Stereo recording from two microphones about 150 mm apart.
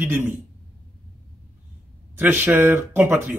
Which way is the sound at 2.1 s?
15° right (ahead or behind).